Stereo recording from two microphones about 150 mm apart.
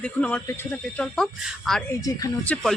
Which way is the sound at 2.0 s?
25° left (ahead or behind).